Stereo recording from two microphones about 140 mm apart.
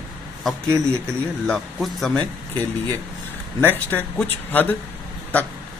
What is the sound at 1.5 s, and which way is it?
Speech, centre (ahead or behind).